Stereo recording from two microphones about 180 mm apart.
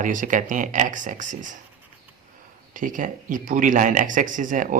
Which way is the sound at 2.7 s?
45° right (ahead or behind).